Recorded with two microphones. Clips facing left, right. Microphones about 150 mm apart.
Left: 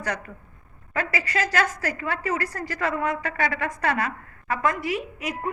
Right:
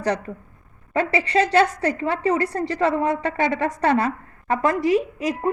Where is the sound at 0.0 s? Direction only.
35° right (ahead or behind).